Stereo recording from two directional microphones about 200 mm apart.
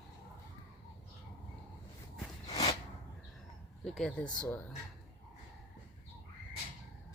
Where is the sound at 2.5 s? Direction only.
25° left (ahead or behind).